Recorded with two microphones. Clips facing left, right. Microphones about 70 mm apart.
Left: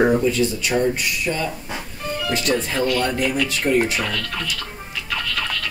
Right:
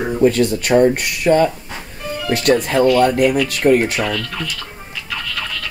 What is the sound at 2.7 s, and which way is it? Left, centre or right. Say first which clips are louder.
Speech: right 10 dB; centre.